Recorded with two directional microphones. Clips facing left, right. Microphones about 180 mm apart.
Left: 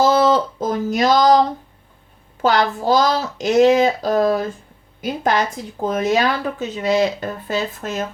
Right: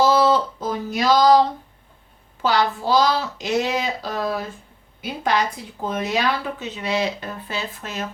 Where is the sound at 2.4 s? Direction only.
45° left (ahead or behind).